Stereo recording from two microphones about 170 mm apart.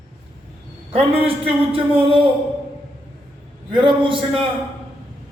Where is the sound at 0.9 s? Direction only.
35° right (ahead or behind).